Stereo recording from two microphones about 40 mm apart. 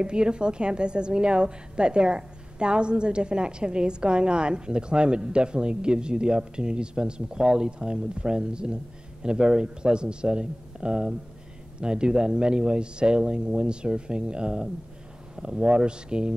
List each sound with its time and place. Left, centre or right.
0.0 s a woman's voice: right